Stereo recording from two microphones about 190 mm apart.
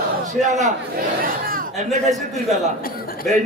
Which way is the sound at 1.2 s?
50° right (ahead or behind).